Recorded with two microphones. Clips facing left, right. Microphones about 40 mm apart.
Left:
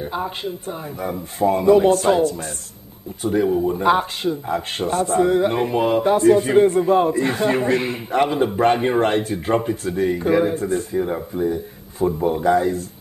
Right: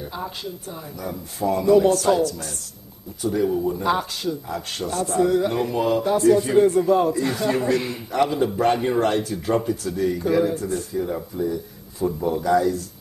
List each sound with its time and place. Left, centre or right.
0.0 s a man's voice: left